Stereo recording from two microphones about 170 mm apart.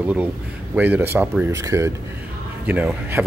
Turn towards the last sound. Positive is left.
turn(degrees=-10)  # may be behind; listen again after turning